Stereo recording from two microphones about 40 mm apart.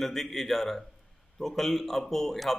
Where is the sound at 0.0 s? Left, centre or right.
Centre.